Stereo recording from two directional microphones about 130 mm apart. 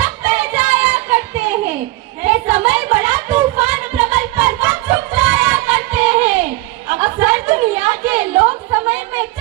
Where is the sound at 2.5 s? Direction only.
15° right (ahead or behind).